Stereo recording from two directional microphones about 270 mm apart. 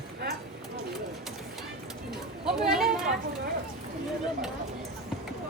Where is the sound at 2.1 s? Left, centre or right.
Centre.